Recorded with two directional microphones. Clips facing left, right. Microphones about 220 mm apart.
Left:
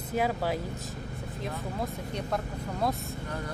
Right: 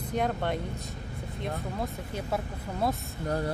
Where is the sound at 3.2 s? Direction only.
40° right (ahead or behind).